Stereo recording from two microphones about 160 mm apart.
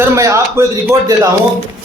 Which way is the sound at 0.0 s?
15° right (ahead or behind).